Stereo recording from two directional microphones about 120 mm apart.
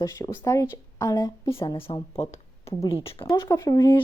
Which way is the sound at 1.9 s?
60° left (ahead or behind).